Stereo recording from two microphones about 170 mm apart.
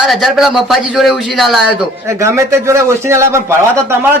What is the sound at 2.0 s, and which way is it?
A man's voice, 15° right (ahead or behind).